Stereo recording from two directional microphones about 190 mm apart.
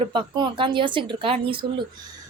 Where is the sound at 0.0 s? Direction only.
25° right (ahead or behind).